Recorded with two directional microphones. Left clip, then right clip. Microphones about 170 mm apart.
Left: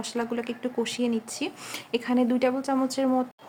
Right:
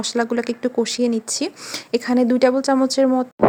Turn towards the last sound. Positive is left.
turn(degrees=-30)  # may be behind; listen again after turning